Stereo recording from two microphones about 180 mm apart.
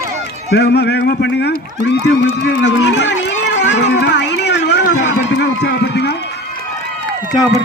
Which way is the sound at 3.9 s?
70° left (ahead or behind).